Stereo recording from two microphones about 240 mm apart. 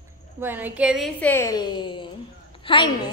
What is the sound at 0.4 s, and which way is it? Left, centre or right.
A woman's voice, centre.